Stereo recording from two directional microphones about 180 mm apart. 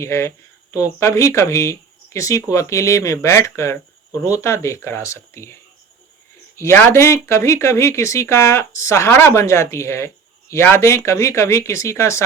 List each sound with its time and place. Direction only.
0.0 s speech: 15° left (ahead or behind)
6.6 s speech: 10° left (ahead or behind)